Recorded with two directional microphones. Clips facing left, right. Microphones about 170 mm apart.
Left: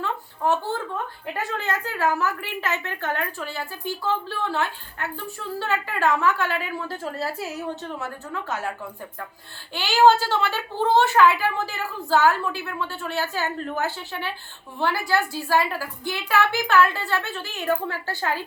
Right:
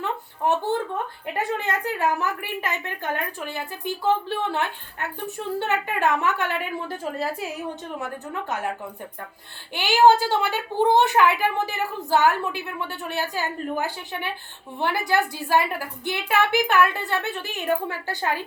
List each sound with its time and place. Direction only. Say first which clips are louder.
0.0 s a sound: even; 20° right (ahead or behind)
1.5 s a woman's voice: right 1 dB; 20° right (ahead or behind)
9.7 s a woman's voice: even; 15° right (ahead or behind)